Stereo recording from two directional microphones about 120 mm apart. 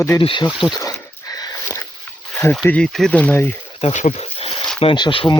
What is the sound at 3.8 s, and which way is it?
Speech, 65° left (ahead or behind).